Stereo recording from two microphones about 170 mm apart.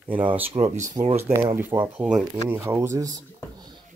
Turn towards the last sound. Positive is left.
turn(degrees=-15)  # may be behind; listen again after turning